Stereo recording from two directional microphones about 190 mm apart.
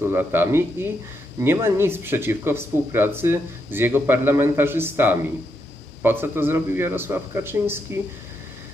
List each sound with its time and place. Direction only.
0.0 s speech: 10° right (ahead or behind)